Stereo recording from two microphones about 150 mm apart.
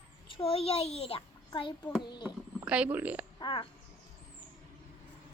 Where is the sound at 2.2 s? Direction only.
10° right (ahead or behind).